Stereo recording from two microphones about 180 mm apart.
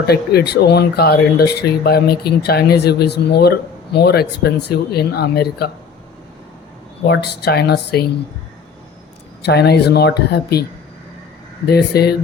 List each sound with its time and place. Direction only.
0.1 s speech: 60° left (ahead or behind)
7.0 s speech: 65° left (ahead or behind)
9.4 s speech: 65° left (ahead or behind)